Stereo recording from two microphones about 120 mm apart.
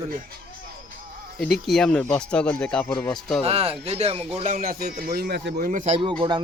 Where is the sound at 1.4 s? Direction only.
Centre (ahead or behind).